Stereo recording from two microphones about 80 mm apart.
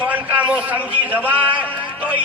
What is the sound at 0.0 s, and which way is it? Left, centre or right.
A man's voice, centre.